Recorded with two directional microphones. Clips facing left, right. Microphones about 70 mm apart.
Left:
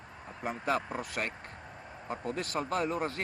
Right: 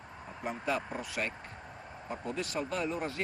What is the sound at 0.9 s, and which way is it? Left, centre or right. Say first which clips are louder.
Speech: left 1 dB; left.